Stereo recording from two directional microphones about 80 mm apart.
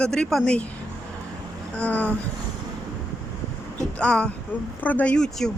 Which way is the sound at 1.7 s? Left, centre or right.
Centre.